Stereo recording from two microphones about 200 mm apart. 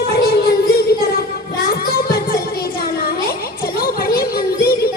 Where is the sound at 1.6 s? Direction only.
50° left (ahead or behind).